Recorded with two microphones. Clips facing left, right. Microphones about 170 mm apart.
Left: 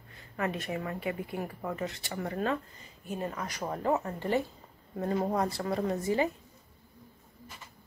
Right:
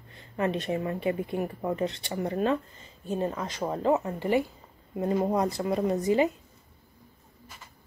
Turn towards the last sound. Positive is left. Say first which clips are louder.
# right 5 dB
turn(degrees=-20)  # may be behind; listen again after turning